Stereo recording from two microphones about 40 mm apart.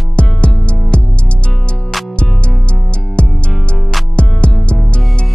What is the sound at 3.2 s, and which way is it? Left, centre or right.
Music, left.